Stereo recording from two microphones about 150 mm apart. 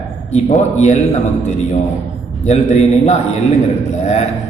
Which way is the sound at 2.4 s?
50° left (ahead or behind).